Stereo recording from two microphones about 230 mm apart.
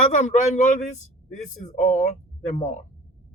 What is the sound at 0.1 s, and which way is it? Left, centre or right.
Speech, left.